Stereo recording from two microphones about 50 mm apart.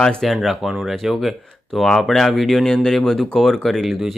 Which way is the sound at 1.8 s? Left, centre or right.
Centre.